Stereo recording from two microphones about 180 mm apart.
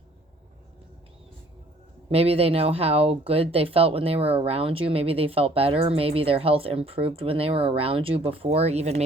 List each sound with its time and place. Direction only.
2.0 s speech: 35° right (ahead or behind)